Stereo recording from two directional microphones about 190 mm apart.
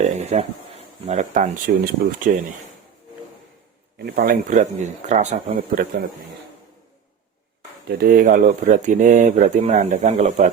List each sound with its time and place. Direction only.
0.0 s a sound: 35° right (ahead or behind)
1.0 s speech: 40° right (ahead or behind)
1.7 s speech: 55° right (ahead or behind)
3.9 s speech: 55° right (ahead or behind)
7.9 s speech: 55° right (ahead or behind)